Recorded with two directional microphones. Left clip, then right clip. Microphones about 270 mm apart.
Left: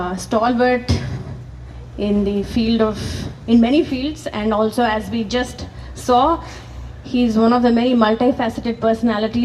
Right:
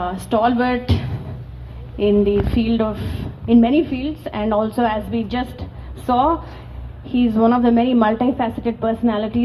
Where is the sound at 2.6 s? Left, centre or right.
Left.